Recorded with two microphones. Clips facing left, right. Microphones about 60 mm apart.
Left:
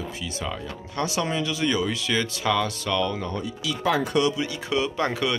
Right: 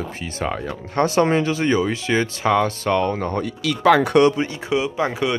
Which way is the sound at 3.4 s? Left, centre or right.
Right.